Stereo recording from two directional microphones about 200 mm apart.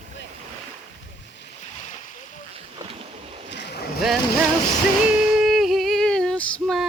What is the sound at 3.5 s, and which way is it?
Boat, 60° left (ahead or behind).